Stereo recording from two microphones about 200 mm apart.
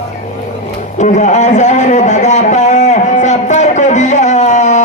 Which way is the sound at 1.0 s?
35° left (ahead or behind).